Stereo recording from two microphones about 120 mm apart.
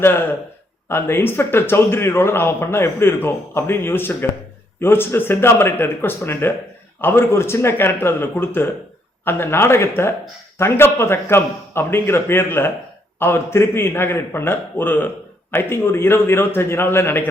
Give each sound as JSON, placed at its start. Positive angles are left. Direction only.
{"t": 0.0, "sound": "speech", "side_deg": 20}